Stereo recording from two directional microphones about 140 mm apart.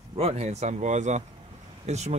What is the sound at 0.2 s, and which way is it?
Speech, 50° right (ahead or behind).